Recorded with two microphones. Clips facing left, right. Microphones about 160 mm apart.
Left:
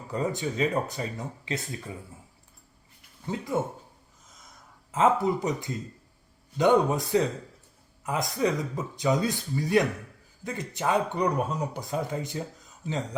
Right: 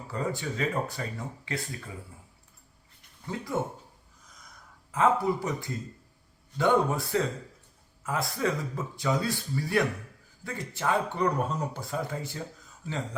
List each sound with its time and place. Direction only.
0.1 s speech: 20° left (ahead or behind)
3.3 s speech: 20° left (ahead or behind)
4.9 s speech: 20° left (ahead or behind)